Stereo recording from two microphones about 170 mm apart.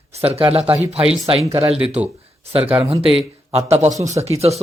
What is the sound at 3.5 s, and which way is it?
Speech, 40° right (ahead or behind).